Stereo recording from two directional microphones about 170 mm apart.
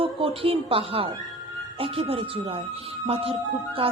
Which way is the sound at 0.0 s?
35° right (ahead or behind).